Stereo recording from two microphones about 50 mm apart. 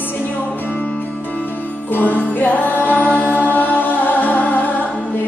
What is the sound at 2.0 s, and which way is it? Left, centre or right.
Music, left.